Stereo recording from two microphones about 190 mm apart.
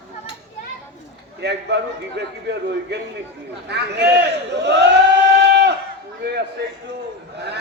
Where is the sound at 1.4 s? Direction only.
60° right (ahead or behind).